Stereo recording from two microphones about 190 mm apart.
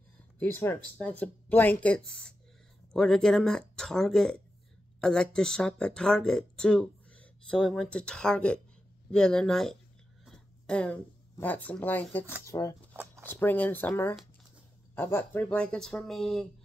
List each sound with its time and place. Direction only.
0.4 s speech: 10° left (ahead or behind)
12.9 s a sound: 10° right (ahead or behind)
13.2 s speech: 10° left (ahead or behind)